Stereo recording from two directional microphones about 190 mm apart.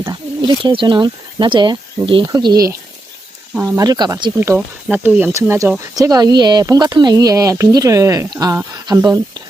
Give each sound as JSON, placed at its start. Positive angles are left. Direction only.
{"t": 0.0, "sound": "speech", "side_deg": -25}